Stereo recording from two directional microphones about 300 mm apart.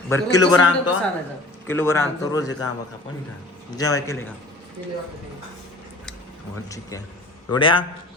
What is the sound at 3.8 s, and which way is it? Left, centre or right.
Speech, centre.